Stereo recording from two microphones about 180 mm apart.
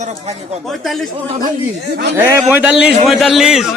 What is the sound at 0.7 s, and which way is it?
Speech, centre (ahead or behind).